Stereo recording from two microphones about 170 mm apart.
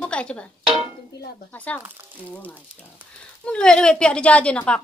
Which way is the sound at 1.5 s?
10° left (ahead or behind).